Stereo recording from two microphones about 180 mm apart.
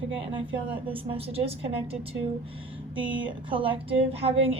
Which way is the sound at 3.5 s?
30° right (ahead or behind).